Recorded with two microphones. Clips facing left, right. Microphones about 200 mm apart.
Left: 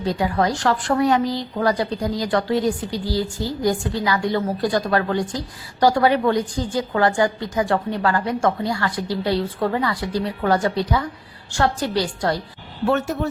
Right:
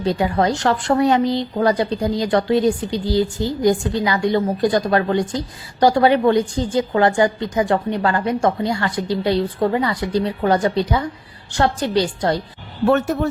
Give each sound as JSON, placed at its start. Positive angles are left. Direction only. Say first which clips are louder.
{"t": 0.0, "sound": "a woman's voice", "louder": "right 3 dB", "side_deg": -25}